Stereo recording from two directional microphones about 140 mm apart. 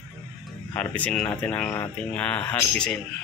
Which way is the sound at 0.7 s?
10° left (ahead or behind).